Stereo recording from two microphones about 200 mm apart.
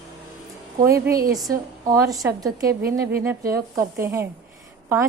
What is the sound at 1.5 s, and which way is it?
A woman's voice, 20° right (ahead or behind).